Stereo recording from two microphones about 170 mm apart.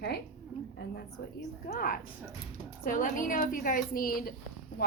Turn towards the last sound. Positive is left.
turn(degrees=70)  # may be behind; listen again after turning